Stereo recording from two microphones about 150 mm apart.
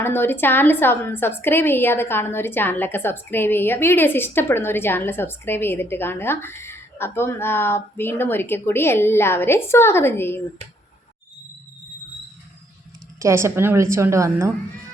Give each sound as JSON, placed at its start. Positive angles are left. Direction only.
{"t": 0.0, "sound": "a woman's voice", "side_deg": 15}
{"t": 13.1, "sound": "a woman's voice", "side_deg": -20}